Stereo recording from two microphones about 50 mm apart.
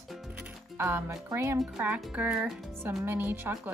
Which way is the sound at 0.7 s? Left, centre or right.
Right.